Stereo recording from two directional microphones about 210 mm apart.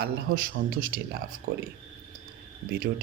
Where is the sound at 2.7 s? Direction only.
45° right (ahead or behind).